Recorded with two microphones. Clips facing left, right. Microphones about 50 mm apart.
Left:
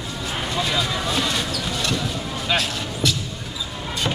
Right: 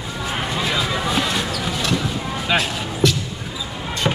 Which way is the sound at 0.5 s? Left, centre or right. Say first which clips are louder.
Even; centre.